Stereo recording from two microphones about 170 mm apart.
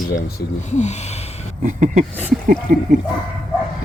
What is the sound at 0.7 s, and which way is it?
Speech, 40° left (ahead or behind).